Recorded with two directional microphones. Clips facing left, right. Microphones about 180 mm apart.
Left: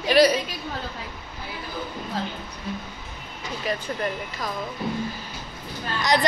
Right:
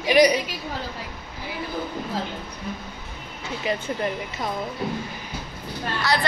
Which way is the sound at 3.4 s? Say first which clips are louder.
Right 2 dB; 25° right (ahead or behind).